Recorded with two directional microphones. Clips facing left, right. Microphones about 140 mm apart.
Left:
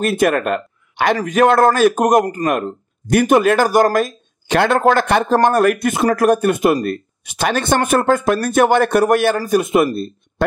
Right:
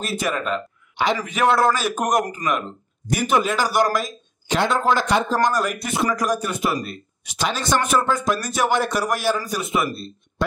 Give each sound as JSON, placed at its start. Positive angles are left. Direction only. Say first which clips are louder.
{"t": 0.0, "sound": "speech", "louder": "left 9 dB", "side_deg": 55}
{"t": 1.2, "sound": "a man's voice", "louder": "left 7 dB", "side_deg": 45}